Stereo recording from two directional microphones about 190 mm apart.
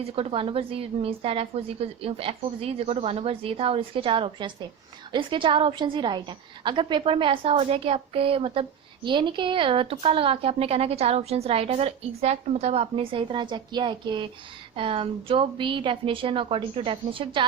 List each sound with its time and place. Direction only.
0.0 s a woman's voice: 30° right (ahead or behind)